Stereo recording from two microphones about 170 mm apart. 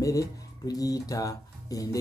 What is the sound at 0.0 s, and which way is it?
Speech, 20° left (ahead or behind).